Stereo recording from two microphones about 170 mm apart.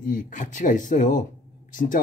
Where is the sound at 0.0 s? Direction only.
50° left (ahead or behind).